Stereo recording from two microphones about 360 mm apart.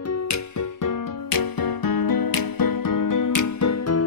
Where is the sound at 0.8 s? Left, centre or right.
Left.